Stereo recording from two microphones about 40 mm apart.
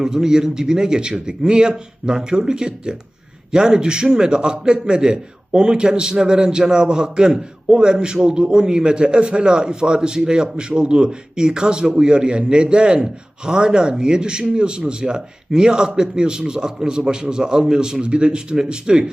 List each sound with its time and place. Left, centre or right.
0.0 s a man's voice: centre